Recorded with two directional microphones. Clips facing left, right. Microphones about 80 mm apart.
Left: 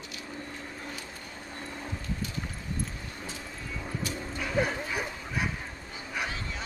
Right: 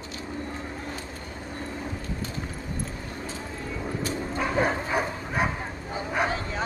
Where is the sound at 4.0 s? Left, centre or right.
Right.